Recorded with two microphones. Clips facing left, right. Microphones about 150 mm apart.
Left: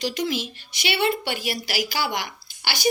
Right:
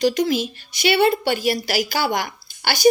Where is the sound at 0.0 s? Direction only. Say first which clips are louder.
Right 7 dB; 45° right (ahead or behind).